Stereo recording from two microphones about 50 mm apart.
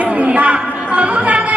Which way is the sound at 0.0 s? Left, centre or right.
Right.